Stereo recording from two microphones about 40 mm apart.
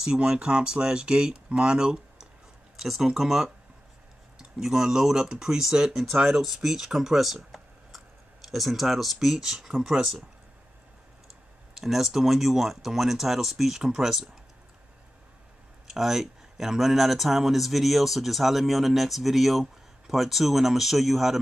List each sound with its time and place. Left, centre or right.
0.0 s speech: centre
2.8 s speech: centre
11.7 s speech: centre
15.9 s speech: centre